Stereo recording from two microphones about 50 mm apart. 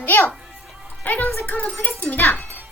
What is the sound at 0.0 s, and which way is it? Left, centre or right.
A child's voice, left.